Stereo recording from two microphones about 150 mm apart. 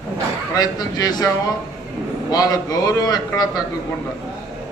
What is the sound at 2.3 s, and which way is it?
A man's voice, 25° left (ahead or behind).